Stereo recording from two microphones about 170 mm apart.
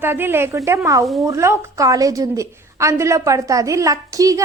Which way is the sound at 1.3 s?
15° right (ahead or behind).